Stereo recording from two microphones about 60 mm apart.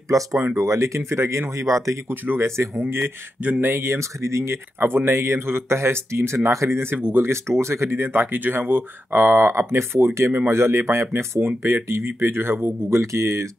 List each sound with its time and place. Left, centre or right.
0.1 s speech: right
1.7 s speech: right
2.0 s speech: right
4.7 s speech: right
8.0 s speech: right
13.0 s speech: right